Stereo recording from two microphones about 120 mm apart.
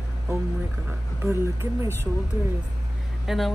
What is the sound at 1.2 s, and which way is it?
Speech, 25° right (ahead or behind).